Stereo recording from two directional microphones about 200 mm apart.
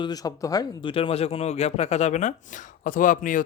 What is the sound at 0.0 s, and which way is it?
Speech, 20° left (ahead or behind).